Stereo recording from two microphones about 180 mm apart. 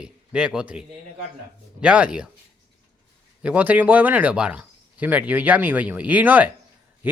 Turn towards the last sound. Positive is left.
turn(degrees=-10)  # may be behind; listen again after turning